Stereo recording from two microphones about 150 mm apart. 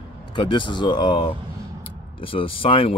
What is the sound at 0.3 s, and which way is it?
Speech, 30° left (ahead or behind).